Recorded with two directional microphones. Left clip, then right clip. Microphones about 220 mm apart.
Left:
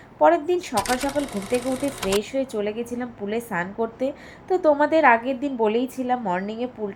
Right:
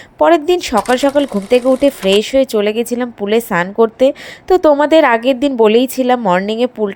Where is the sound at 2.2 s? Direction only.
45° right (ahead or behind).